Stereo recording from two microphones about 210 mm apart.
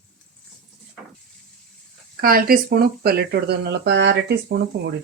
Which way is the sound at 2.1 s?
45° right (ahead or behind).